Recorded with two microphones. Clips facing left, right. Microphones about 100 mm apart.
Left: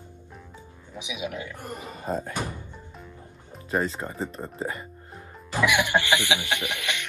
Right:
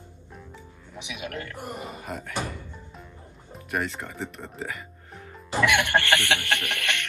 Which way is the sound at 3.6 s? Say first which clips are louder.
Left 3 dB; 25° left (ahead or behind).